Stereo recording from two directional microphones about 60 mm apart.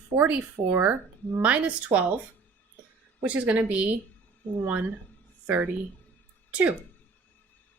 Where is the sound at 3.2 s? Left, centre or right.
Right.